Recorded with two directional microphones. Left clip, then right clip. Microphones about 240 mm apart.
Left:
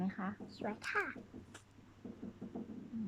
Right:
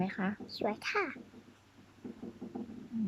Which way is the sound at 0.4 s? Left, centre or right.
Centre.